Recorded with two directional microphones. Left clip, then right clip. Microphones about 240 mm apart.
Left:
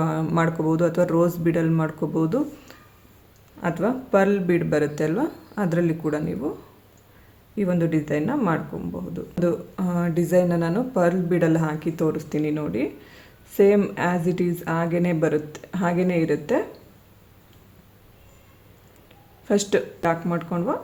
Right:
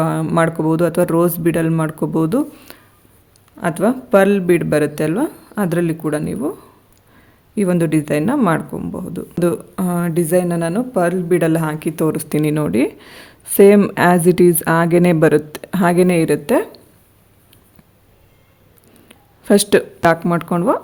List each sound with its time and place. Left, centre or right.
0.0 s speech: right
7.5 s speech: right
19.0 s a sound: right
20.1 s speech: right